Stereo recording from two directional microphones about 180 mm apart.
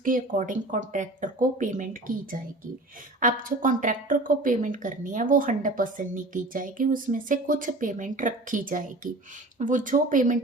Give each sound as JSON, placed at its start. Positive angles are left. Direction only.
{"t": 0.0, "sound": "speech", "side_deg": -50}
{"t": 3.2, "sound": "speech", "side_deg": -45}